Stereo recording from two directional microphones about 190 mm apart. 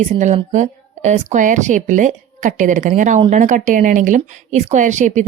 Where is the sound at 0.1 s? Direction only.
40° right (ahead or behind).